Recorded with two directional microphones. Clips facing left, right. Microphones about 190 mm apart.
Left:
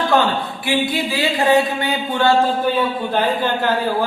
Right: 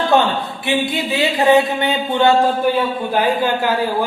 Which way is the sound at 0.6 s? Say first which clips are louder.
Even; 20° right (ahead or behind).